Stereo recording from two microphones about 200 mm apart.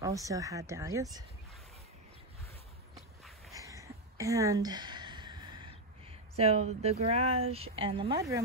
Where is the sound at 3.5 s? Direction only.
15° right (ahead or behind).